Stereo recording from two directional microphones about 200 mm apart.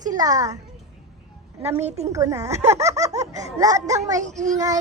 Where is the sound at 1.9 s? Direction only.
35° right (ahead or behind).